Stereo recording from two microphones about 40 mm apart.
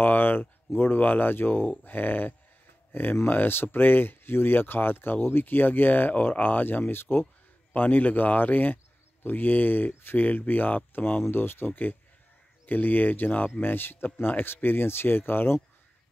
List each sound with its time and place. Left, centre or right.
0.0 s speech: left
7.7 s speech: left
11.2 s speech: left
11.6 s speech: left
13.6 s speech: left